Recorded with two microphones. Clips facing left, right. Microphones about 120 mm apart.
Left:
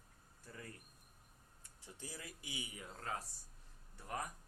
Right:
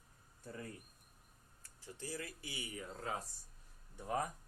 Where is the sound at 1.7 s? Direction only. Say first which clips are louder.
Right 7 dB; 15° left (ahead or behind).